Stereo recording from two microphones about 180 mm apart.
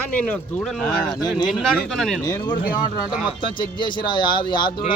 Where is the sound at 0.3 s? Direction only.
5° left (ahead or behind).